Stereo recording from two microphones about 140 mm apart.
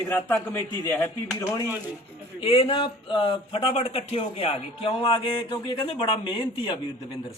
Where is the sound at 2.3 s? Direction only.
40° left (ahead or behind).